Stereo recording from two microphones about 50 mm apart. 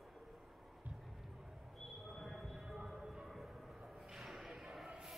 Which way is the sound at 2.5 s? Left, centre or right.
Centre.